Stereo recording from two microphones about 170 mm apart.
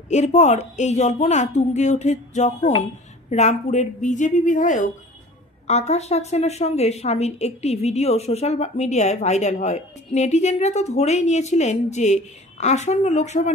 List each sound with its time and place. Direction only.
0.1 s a woman's voice: 45° left (ahead or behind)